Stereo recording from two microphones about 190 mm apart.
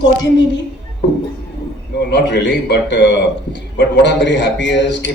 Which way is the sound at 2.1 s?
65° left (ahead or behind).